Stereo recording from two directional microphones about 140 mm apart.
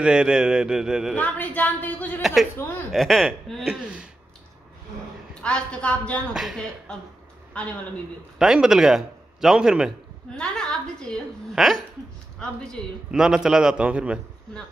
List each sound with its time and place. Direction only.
0.0 s a woman's voice: 5° right (ahead or behind)
1.1 s a woman's voice: 10° left (ahead or behind)
2.9 s a woman's voice: centre (ahead or behind)
5.3 s a woman's voice: 5° left (ahead or behind)
6.3 s a woman's voice: centre (ahead or behind)
8.4 s a man's voice: 5° right (ahead or behind)
10.3 s a woman's voice: 5° left (ahead or behind)
13.1 s a woman's voice: 5° right (ahead or behind)